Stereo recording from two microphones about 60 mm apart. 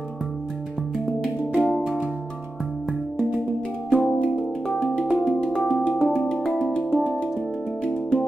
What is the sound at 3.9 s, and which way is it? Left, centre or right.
Music, centre.